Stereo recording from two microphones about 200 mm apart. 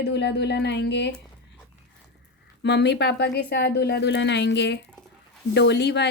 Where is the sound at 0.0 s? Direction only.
55° left (ahead or behind).